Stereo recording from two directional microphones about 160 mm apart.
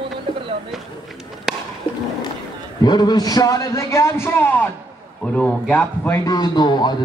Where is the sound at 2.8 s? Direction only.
25° left (ahead or behind); by 6.2 s 10° left (ahead or behind).